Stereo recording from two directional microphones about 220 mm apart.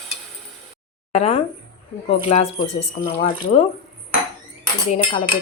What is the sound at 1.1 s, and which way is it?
Cutlery, 25° left (ahead or behind).